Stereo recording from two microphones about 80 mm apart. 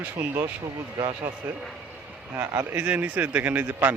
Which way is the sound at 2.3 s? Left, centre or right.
Right.